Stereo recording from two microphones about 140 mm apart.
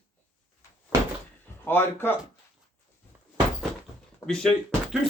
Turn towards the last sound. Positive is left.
turn(degrees=5)  # may be behind; listen again after turning